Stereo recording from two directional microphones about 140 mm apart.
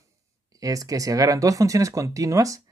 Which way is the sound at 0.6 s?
25° right (ahead or behind).